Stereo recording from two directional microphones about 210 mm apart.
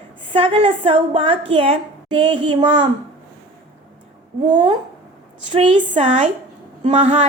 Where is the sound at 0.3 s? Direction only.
25° right (ahead or behind).